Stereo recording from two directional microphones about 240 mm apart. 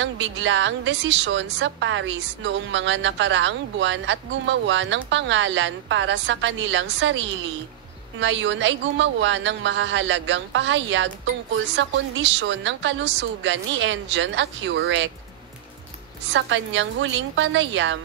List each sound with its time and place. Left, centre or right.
0.0 s a woman's voice: right
16.3 s a woman's voice: right